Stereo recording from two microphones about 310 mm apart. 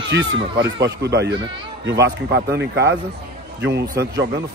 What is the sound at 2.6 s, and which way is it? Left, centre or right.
Speech, right.